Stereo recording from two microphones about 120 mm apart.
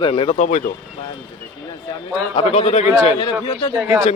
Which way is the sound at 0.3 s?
90° left.